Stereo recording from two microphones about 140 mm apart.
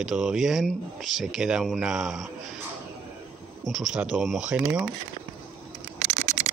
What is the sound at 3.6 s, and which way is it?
Speech, 5° right (ahead or behind).